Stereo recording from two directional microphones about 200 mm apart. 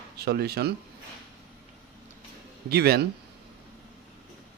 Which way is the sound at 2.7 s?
50° right (ahead or behind).